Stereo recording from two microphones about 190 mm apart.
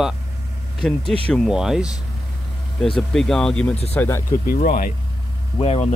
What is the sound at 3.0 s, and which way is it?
Speech, centre (ahead or behind).